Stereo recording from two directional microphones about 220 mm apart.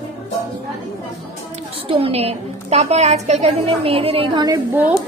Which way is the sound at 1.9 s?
25° right (ahead or behind).